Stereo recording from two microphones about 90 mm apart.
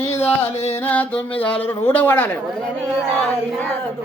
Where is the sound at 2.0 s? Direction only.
20° left (ahead or behind).